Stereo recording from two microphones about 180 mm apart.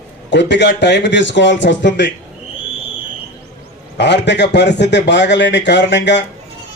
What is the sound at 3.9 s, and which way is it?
A man's voice, 75° left (ahead or behind).